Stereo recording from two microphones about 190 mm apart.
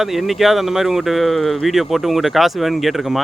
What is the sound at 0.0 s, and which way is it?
Speech, centre (ahead or behind).